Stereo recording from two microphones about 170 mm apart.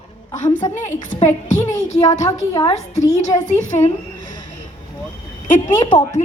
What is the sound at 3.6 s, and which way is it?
Speech, 40° left (ahead or behind).